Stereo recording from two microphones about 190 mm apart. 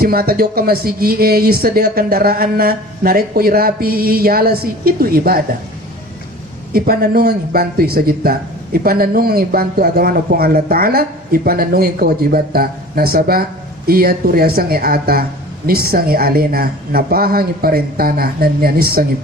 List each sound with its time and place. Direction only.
0.0 s a man's voice: 50° right (ahead or behind)
6.7 s a man's voice: 50° right (ahead or behind)